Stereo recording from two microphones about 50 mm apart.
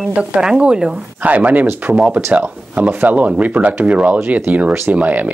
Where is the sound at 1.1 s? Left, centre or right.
Right.